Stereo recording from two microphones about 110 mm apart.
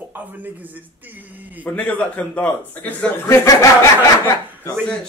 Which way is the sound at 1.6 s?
15° left (ahead or behind).